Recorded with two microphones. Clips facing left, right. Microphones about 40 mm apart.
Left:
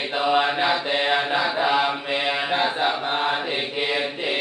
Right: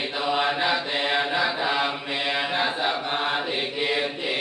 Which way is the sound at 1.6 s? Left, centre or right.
Left.